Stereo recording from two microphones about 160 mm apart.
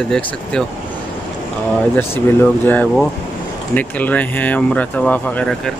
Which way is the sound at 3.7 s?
10° left (ahead or behind).